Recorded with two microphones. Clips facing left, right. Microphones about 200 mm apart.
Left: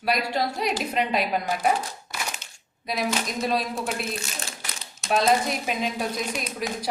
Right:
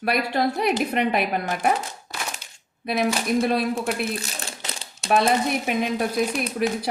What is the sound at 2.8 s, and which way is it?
A woman's voice, 60° right (ahead or behind).